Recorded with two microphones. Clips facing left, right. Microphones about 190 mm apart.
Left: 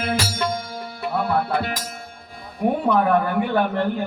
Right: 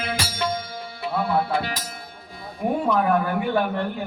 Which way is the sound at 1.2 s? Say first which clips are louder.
Left 1 dB; 60° left (ahead or behind).